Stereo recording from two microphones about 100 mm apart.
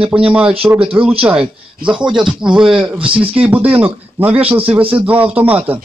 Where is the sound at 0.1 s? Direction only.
15° right (ahead or behind).